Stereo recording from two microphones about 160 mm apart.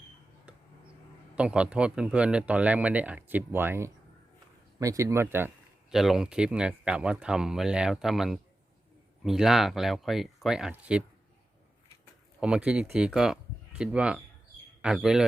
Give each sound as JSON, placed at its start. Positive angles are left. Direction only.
{"t": 0.5, "sound": "a sound", "side_deg": -10}
{"t": 1.4, "sound": "speech", "side_deg": -5}
{"t": 5.9, "sound": "speech", "side_deg": 0}
{"t": 12.4, "sound": "speech", "side_deg": -5}